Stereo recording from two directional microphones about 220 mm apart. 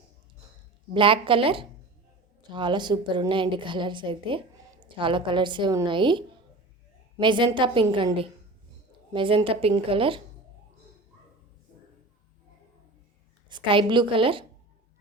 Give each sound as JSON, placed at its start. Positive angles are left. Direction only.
{"t": 0.9, "sound": "a woman's voice", "side_deg": -25}
{"t": 13.5, "sound": "a woman's voice", "side_deg": -20}